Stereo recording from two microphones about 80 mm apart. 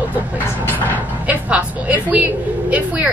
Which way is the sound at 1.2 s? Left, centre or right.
Centre.